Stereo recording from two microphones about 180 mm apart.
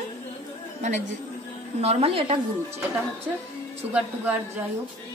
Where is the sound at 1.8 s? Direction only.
35° right (ahead or behind).